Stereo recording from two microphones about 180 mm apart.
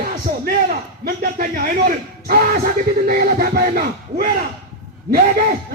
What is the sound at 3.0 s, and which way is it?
Battle cry, 55° right (ahead or behind).